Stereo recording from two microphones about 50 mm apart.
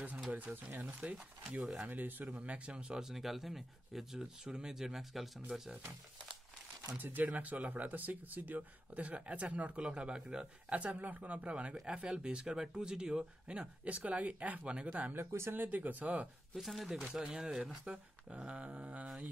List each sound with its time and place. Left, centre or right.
0.3 s speech: right
2.3 s speech: right
3.0 s speech: centre
7.0 s speech: right
10.9 s speech: right
15.1 s speech: right
15.5 s speech: right
16.5 s speech: centre
17.1 s speech: centre